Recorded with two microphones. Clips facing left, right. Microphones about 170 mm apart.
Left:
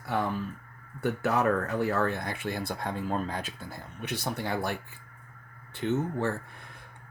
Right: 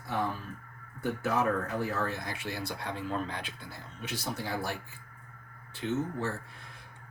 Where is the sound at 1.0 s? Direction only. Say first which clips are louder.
Left 3 dB; 65° left (ahead or behind).